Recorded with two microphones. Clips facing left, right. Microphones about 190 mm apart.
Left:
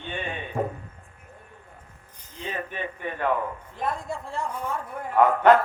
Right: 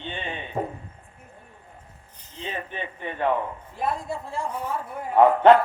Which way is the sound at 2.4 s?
25° right (ahead or behind).